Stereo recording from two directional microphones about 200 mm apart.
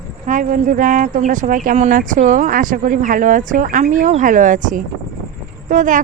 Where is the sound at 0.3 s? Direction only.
40° right (ahead or behind).